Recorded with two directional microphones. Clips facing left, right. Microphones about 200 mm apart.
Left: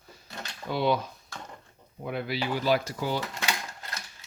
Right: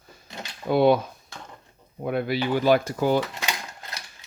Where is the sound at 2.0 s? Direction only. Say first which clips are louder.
Right 6 dB; 50° right (ahead or behind).